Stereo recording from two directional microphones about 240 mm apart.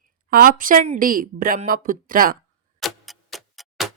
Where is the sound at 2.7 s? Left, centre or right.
Centre.